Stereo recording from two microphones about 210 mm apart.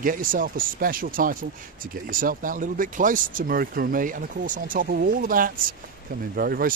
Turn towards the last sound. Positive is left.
turn(degrees=-45)  # may be behind; listen again after turning